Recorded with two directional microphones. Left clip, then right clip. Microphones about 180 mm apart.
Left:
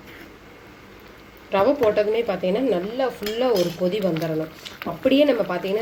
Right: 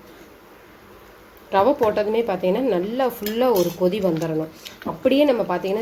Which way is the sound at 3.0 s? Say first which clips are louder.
Right 2 dB; 15° right (ahead or behind).